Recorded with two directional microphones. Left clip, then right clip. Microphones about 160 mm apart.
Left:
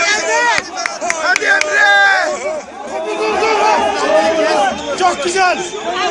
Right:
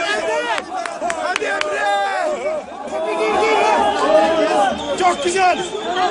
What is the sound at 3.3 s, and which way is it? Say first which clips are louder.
Chatter: left 3 dB; 35° left (ahead or behind).